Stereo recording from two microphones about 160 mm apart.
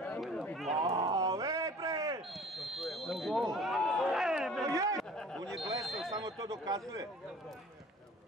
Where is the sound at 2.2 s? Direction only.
Centre (ahead or behind).